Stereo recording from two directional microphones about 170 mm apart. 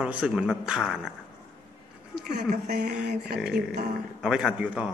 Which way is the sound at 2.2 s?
60° right (ahead or behind).